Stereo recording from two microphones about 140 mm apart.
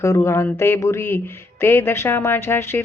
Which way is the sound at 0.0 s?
20° left (ahead or behind).